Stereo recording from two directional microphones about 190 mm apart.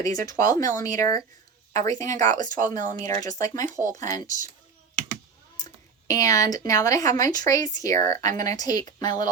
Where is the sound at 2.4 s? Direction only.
45° right (ahead or behind).